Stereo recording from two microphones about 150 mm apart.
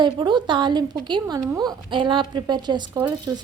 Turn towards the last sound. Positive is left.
turn(degrees=-25)  # may be behind; listen again after turning